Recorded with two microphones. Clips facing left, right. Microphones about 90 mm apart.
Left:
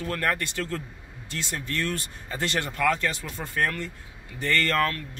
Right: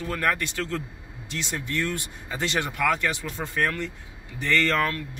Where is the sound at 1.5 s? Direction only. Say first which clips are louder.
Right 1 dB; 20° right (ahead or behind).